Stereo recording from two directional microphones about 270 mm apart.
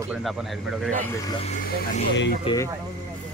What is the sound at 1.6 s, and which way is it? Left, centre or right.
Speech, left.